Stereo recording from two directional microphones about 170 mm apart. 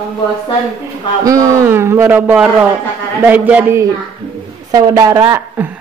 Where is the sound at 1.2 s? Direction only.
20° right (ahead or behind).